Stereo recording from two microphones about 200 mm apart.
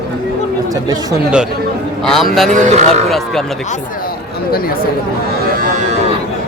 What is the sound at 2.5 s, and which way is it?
Speech, 35° right (ahead or behind).